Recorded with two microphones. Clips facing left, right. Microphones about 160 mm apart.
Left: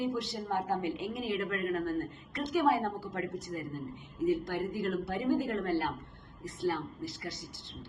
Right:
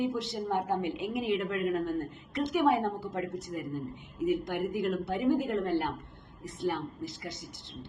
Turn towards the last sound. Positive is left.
turn(degrees=-20)  # may be behind; listen again after turning